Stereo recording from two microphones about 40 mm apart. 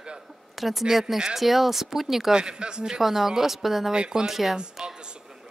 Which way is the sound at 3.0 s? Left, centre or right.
Centre.